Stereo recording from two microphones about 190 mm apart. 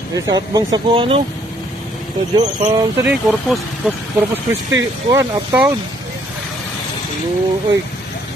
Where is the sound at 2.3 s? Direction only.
20° right (ahead or behind).